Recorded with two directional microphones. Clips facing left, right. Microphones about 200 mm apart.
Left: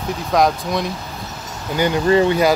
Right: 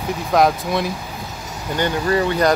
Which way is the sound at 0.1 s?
Centre (ahead or behind).